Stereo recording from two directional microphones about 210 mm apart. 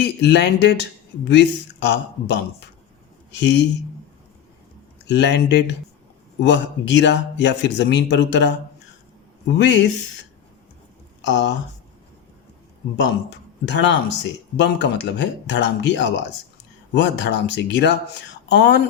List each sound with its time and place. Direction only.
0.0 s speech: 55° left (ahead or behind)
5.0 s speech: 55° left (ahead or behind)
9.6 s speech: 60° left (ahead or behind)
11.3 s speech: 60° left (ahead or behind)
13.7 s speech: 60° left (ahead or behind)